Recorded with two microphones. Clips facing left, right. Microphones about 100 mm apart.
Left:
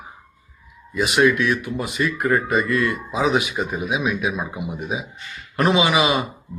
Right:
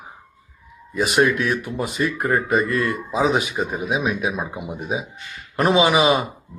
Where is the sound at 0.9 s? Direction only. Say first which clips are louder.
Left 1 dB; 35° right (ahead or behind).